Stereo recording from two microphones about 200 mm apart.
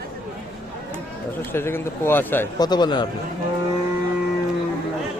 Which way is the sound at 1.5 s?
10° left (ahead or behind).